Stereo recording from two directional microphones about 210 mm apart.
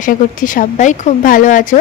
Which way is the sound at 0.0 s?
40° left (ahead or behind).